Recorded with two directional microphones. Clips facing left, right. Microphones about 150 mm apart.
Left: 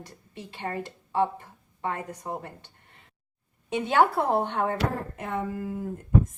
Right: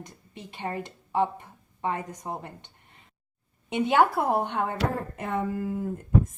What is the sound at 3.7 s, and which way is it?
Speech, 15° right (ahead or behind).